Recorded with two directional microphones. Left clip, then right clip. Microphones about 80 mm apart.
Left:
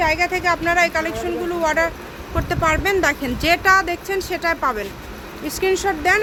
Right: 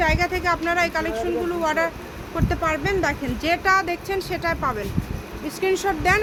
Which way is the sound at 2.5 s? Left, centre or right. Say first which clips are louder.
Left 5 dB; left.